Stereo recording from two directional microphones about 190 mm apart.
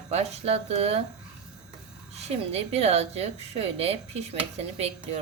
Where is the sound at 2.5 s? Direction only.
35° right (ahead or behind).